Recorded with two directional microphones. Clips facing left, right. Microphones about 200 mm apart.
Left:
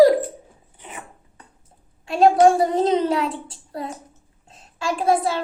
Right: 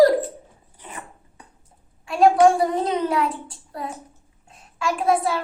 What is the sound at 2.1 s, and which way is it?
A child's voice, 25° left (ahead or behind).